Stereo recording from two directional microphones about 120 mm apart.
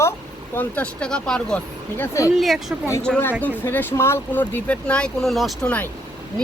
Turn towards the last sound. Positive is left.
turn(degrees=0)  # may be behind; listen again after turning